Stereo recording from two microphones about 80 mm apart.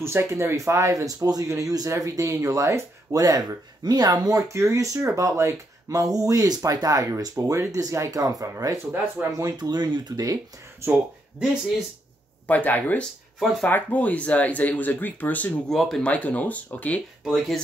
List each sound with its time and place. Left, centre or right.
0.0 s speech: right
5.9 s speech: right
9.2 s speech: centre
9.6 s speech: right
10.9 s speech: centre
12.4 s speech: left
15.7 s speech: centre
16.0 s speech: centre
17.2 s speech: centre